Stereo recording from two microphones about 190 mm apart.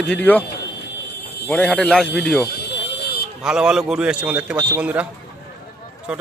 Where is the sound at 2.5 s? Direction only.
55° left (ahead or behind).